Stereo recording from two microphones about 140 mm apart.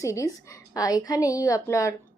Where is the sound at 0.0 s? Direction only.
20° left (ahead or behind).